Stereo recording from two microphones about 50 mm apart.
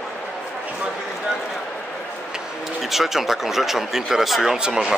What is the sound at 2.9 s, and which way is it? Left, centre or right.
Speech, centre.